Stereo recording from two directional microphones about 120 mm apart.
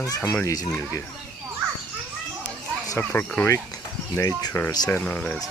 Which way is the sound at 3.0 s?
10° left (ahead or behind).